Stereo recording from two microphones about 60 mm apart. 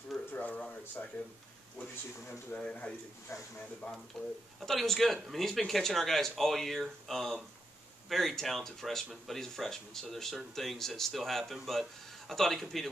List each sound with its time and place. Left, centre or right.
0.3 s a sound: left
1.8 s speech: left
3.3 s speech: left
4.1 s speech: centre